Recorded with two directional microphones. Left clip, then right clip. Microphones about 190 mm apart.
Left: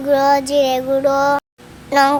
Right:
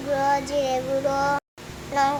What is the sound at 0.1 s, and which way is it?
Child singing, 40° left (ahead or behind).